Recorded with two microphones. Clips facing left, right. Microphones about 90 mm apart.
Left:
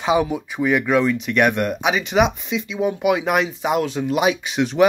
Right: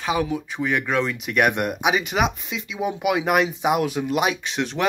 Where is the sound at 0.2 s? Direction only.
5° left (ahead or behind).